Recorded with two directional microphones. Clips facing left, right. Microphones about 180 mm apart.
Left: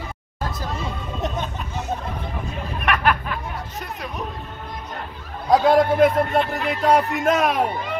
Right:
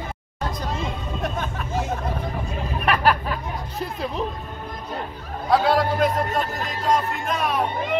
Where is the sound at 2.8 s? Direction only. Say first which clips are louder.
Right 1 dB; 35° right (ahead or behind).